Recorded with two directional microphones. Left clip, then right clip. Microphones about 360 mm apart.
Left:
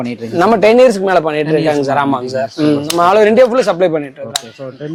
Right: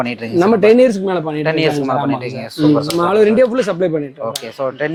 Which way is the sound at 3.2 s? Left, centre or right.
Left.